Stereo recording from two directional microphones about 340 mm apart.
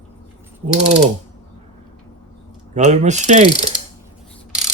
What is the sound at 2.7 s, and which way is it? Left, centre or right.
Speech, centre.